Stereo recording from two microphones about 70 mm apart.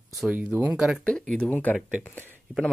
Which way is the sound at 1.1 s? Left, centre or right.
Centre.